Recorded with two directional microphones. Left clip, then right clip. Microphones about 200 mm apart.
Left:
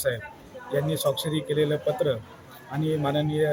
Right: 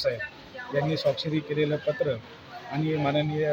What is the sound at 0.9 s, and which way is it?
Speech, 30° left (ahead or behind).